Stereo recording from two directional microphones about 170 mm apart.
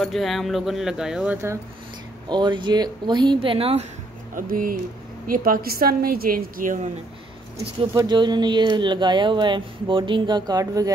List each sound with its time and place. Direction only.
0.0 s speech: centre (ahead or behind)
2.2 s speech: 25° right (ahead or behind)
4.4 s a woman's voice: 55° right (ahead or behind)
7.9 s speech: 25° right (ahead or behind)